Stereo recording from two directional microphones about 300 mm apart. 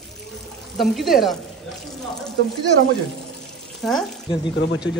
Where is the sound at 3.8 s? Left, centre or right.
Centre.